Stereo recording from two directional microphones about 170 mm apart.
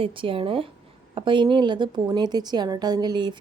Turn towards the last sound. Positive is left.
turn(degrees=-25)  # may be behind; listen again after turning